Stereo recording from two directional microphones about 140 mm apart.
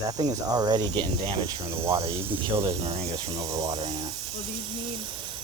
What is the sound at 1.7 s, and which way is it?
Speech, 20° right (ahead or behind).